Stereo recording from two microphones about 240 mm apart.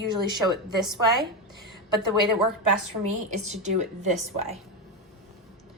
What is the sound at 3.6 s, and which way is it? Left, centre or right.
Speech, right.